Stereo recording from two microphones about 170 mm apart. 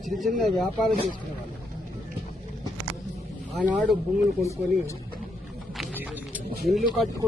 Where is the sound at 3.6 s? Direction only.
5° right (ahead or behind).